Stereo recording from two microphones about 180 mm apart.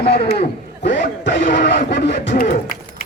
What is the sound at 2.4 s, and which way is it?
Speech, 45° left (ahead or behind).